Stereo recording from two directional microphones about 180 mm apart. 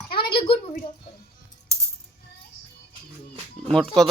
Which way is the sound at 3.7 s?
5° left (ahead or behind).